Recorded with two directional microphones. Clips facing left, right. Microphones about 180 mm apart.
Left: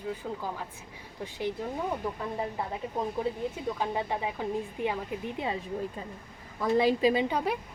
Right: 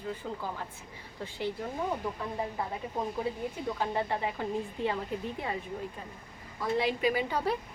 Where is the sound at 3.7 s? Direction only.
15° left (ahead or behind).